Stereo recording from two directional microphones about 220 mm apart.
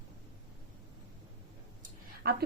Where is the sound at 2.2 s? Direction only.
40° right (ahead or behind).